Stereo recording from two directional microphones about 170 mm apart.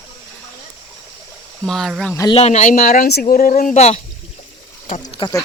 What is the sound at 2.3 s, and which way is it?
Speech, 40° left (ahead or behind).